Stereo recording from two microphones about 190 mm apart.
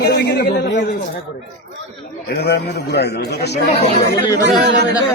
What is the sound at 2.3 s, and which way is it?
A man's voice, 60° left (ahead or behind).